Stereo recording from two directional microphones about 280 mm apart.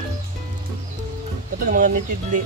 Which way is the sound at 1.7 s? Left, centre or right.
Right.